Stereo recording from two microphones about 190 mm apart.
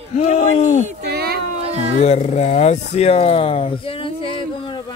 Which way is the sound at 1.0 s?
55° right (ahead or behind).